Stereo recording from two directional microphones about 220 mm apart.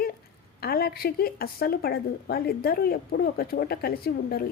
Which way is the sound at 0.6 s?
45° left (ahead or behind).